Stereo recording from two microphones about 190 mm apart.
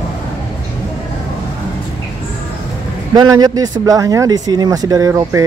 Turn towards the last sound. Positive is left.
turn(degrees=-20)  # may be behind; listen again after turning